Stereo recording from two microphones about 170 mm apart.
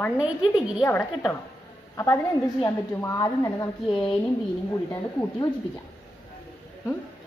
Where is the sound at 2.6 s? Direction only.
20° left (ahead or behind).